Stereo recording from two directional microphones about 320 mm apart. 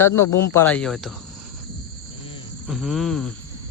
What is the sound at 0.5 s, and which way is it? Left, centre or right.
Cricket, centre.